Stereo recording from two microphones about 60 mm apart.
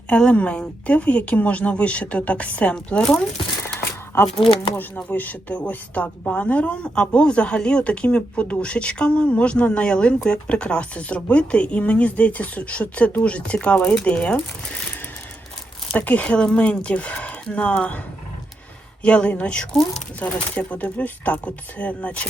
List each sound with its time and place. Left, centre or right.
0.1 s speech: centre
2.7 s speech: centre
3.8 s a sound: left
5.0 s speech: left
16.0 s speech: left
19.0 s speech: centre